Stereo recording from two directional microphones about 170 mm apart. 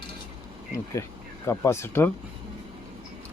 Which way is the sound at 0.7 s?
20° left (ahead or behind).